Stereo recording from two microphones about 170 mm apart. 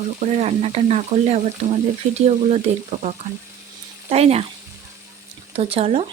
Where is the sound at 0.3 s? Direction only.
40° right (ahead or behind).